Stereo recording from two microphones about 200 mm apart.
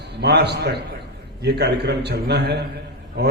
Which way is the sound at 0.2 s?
55° right (ahead or behind).